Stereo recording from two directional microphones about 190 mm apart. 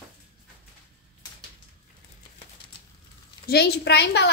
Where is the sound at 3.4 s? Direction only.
60° left (ahead or behind).